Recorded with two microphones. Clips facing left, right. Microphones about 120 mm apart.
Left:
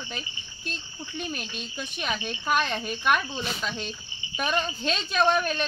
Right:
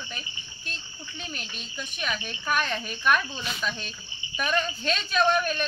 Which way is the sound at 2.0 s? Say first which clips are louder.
Left 2 dB; 20° left (ahead or behind).